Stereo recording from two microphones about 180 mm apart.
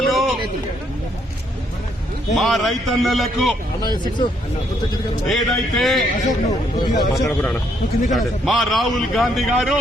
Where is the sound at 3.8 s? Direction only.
25° left (ahead or behind).